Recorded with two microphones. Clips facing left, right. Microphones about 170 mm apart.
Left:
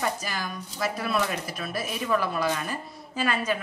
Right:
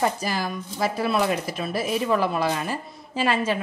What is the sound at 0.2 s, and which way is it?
Speech, 35° right (ahead or behind).